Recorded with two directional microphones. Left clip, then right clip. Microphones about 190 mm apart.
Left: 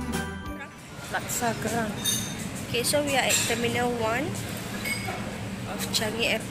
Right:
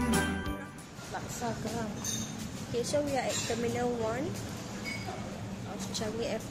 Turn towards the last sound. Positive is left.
turn(degrees=-20)  # may be behind; listen again after turning